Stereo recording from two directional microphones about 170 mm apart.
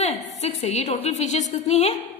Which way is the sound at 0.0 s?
40° left (ahead or behind).